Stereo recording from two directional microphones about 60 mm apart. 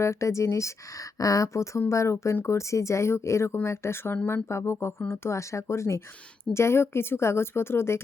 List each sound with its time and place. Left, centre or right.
0.0 s speech: left
1.2 s speech: left
2.3 s speech: left